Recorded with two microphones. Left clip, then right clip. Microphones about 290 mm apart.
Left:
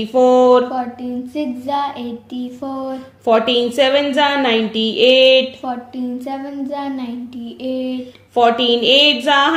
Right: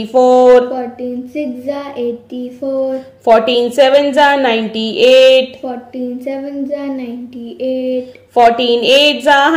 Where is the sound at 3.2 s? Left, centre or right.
Centre.